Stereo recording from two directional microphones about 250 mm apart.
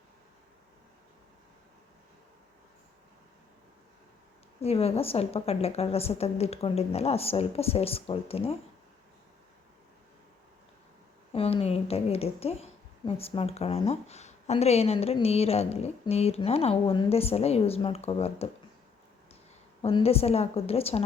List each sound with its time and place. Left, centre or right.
4.6 s speech: left
11.3 s speech: left
19.8 s speech: left